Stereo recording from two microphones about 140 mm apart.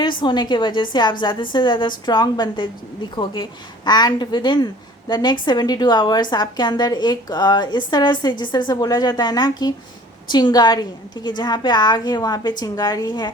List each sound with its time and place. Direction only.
0.0 s a woman's voice: 35° left (ahead or behind)